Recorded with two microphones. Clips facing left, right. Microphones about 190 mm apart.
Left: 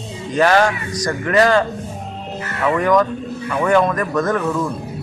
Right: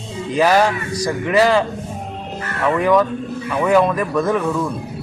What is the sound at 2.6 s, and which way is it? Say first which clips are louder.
A woman's voice: even; 5° right (ahead or behind).